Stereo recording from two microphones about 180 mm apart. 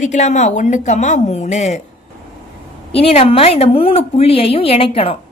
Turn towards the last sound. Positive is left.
turn(degrees=30)  # may be behind; listen again after turning